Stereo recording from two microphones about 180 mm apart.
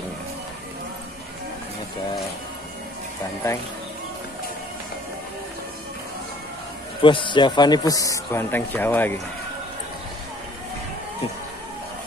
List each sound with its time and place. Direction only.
7.0 s a man's voice: 30° left (ahead or behind); by 9.2 s 10° left (ahead or behind)